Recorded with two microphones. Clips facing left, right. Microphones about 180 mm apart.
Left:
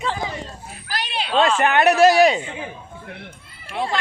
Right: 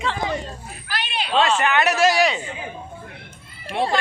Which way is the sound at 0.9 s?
35° left (ahead or behind).